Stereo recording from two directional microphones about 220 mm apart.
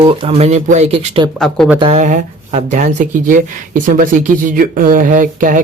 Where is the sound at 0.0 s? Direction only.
25° right (ahead or behind).